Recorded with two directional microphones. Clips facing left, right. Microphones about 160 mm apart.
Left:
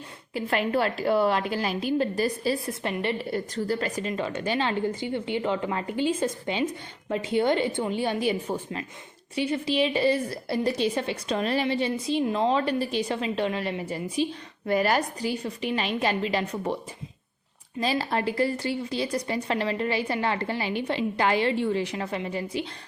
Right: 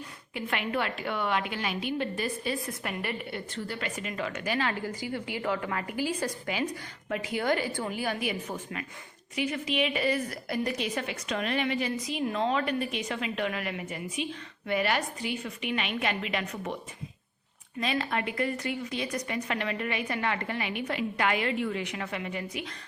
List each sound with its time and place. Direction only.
0.3 s a woman's voice: 35° left (ahead or behind)
3.2 s a woman's voice: 40° left (ahead or behind)
17.7 s a woman's voice: 35° left (ahead or behind)